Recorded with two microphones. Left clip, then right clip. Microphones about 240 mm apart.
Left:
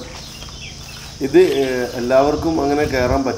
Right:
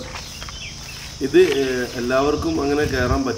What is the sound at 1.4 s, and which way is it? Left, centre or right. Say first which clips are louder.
Speech: left 2 dB; centre.